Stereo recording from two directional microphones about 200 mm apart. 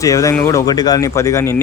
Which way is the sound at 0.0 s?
15° left (ahead or behind).